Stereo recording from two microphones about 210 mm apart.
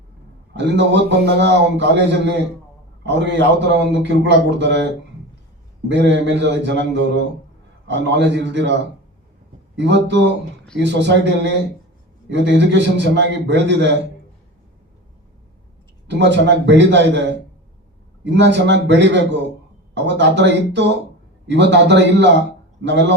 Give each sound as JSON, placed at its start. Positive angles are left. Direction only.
{"t": 0.5, "sound": "a man's voice", "side_deg": -55}
{"t": 9.7, "sound": "a man's voice", "side_deg": -55}
{"t": 16.0, "sound": "a man's voice", "side_deg": -55}